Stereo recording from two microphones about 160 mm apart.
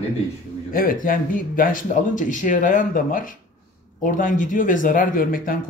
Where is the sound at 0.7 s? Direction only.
60° left (ahead or behind).